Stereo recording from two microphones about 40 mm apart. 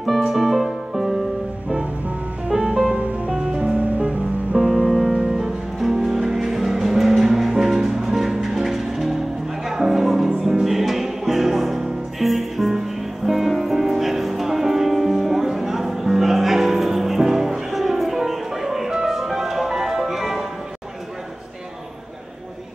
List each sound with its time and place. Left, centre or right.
0.2 s music: centre
2.5 s music: centre
2.9 s music: right
3.3 s music: right
3.7 s music: right
4.6 s music: centre
5.2 s music: centre